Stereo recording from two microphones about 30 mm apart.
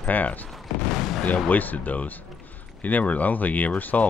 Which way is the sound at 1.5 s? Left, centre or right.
Left.